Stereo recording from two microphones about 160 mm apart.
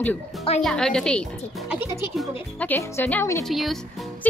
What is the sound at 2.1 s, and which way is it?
Speech, 10° left (ahead or behind).